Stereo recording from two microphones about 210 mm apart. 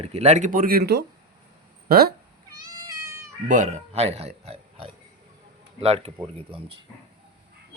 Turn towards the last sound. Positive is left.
turn(degrees=-25)  # may be behind; listen again after turning